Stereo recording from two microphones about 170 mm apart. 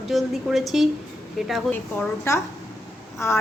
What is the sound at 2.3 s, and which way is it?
A woman's voice, 15° left (ahead or behind).